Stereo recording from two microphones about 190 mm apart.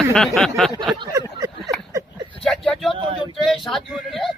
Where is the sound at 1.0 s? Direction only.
20° right (ahead or behind).